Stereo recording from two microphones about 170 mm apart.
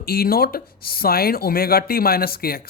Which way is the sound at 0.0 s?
60° left (ahead or behind).